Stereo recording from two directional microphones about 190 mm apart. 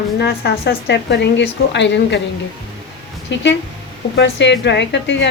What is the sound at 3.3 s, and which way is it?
A woman's voice, 70° left (ahead or behind).